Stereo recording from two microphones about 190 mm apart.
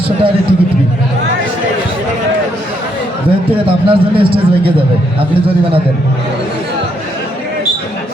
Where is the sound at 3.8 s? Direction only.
30° right (ahead or behind).